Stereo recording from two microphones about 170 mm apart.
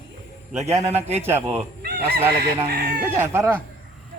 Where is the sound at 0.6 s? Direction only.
40° right (ahead or behind).